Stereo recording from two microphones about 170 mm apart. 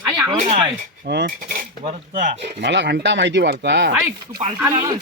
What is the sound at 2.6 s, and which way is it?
A man's voice, 90° right.